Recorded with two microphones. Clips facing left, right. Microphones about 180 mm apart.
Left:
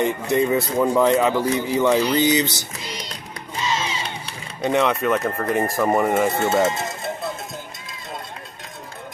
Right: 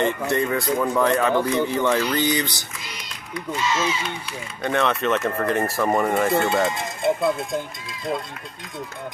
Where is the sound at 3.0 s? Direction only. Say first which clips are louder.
Right 1 dB; 35° left (ahead or behind).